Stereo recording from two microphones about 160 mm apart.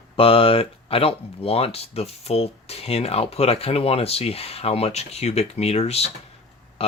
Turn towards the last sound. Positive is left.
turn(degrees=40)  # may be behind; listen again after turning